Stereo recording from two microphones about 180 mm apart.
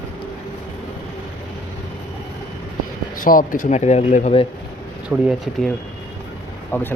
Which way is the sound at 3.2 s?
50° left (ahead or behind).